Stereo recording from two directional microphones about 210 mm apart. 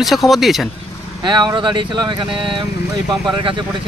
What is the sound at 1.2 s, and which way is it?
Speech, 20° right (ahead or behind).